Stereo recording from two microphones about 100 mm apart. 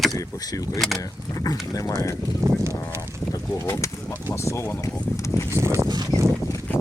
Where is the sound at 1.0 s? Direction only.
35° left (ahead or behind).